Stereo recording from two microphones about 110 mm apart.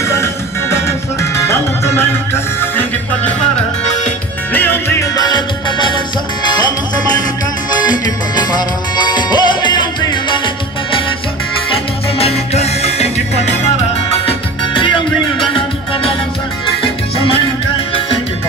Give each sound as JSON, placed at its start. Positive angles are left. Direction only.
{"t": 0.0, "sound": "music", "side_deg": 25}
{"t": 4.5, "sound": "music", "side_deg": 20}
{"t": 5.1, "sound": "music", "side_deg": 40}
{"t": 9.0, "sound": "music", "side_deg": 40}
{"t": 12.2, "sound": "music", "side_deg": 70}
{"t": 14.2, "sound": "music", "side_deg": 50}